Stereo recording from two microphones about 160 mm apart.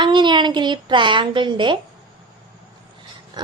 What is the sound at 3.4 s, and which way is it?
Speech, 25° right (ahead or behind).